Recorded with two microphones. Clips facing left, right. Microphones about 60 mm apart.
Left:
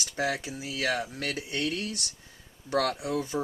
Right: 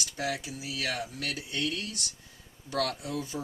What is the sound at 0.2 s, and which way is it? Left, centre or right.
Speech, left.